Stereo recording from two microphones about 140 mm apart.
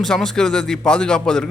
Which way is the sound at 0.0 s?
5° left (ahead or behind).